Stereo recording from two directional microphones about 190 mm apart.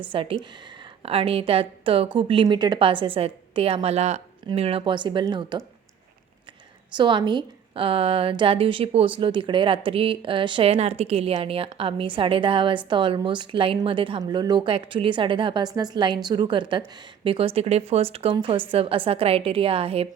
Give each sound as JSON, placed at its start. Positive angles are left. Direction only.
{"t": 0.1, "sound": "a woman's voice", "side_deg": -30}
{"t": 6.9, "sound": "a woman's voice", "side_deg": -25}